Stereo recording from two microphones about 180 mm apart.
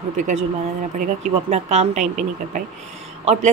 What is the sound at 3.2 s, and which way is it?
Speech, 35° right (ahead or behind).